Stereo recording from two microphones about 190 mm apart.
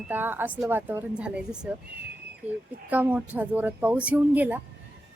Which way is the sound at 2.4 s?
35° right (ahead or behind).